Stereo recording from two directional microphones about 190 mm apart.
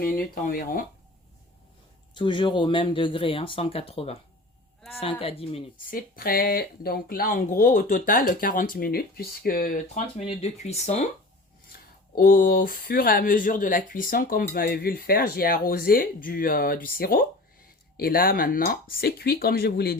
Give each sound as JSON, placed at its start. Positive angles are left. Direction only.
{"t": 0.0, "sound": "speech", "side_deg": 50}
{"t": 2.1, "sound": "speech", "side_deg": 25}
{"t": 5.2, "sound": "speech", "side_deg": 30}
{"t": 5.7, "sound": "speech", "side_deg": 50}
{"t": 11.7, "sound": "speech", "side_deg": 50}